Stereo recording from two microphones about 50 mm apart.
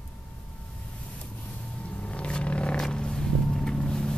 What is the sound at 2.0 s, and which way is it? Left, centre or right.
Wild animals, left.